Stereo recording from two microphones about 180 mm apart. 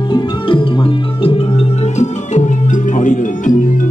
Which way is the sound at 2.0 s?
40° left (ahead or behind).